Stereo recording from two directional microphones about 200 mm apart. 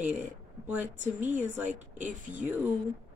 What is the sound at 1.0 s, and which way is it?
A woman's voice, 40° right (ahead or behind).